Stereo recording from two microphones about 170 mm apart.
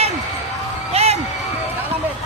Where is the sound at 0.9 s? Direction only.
40° right (ahead or behind).